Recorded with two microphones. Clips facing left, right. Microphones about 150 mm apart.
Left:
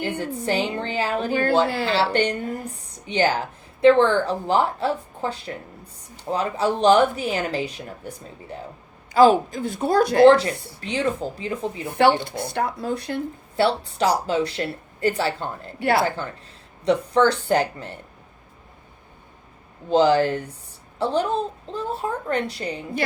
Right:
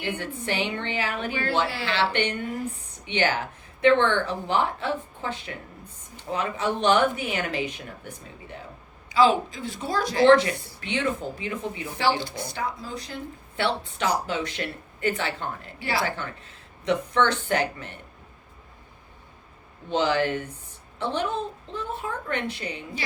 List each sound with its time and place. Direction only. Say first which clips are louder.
0.0 s a woman's voice: left 5 dB; 35° left (ahead or behind)
9.1 s a woman's voice: left 5 dB; 50° left (ahead or behind)
10.2 s a woman's voice: even; 30° left (ahead or behind)
11.9 s speech: left 7 dB; 60° left (ahead or behind)
13.6 s a woman's voice: left 6 dB; 35° left (ahead or behind)
15.8 s speech: left 8 dB; 55° left (ahead or behind)
16.0 s a woman's voice: left 4 dB; 35° left (ahead or behind)
19.9 s a woman's voice: left 6 dB; 35° left (ahead or behind)